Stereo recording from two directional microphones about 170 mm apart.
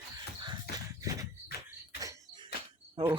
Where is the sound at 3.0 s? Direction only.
25° right (ahead or behind).